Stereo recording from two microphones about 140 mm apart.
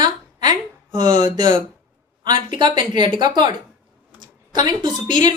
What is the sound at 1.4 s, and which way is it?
Speech, 30° right (ahead or behind).